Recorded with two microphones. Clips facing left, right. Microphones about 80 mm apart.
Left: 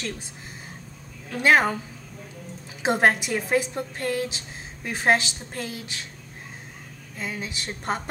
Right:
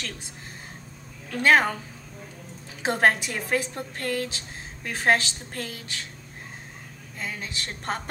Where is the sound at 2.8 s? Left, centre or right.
Centre.